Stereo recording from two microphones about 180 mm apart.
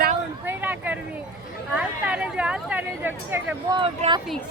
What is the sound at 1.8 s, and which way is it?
Speech, 5° right (ahead or behind).